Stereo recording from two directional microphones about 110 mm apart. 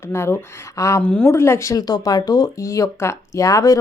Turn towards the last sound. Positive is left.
turn(degrees=30)  # may be behind; listen again after turning